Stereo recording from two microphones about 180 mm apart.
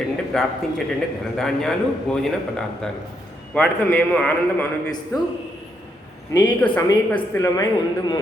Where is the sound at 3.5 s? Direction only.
10° left (ahead or behind).